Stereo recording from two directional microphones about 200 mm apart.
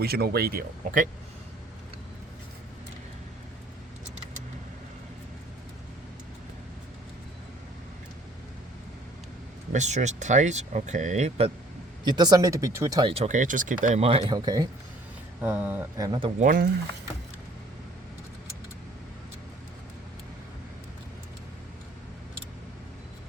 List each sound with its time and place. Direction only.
0.0 s speech: 50° right (ahead or behind)
9.7 s speech: 35° right (ahead or behind)
12.0 s speech: 20° right (ahead or behind)
14.3 s speech: 20° right (ahead or behind)
15.4 s speech: 10° right (ahead or behind)
16.4 s speech: 45° right (ahead or behind)